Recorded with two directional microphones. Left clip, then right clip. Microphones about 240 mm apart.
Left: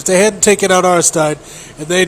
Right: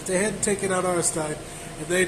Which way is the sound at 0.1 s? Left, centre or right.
Left.